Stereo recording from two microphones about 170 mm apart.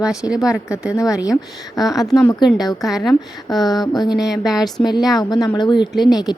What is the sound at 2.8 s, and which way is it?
Speech, centre (ahead or behind).